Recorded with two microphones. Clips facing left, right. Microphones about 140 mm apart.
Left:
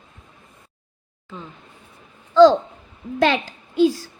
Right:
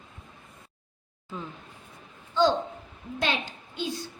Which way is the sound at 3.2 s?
90° left.